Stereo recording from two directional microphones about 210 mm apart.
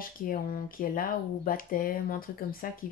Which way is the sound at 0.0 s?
45° left (ahead or behind).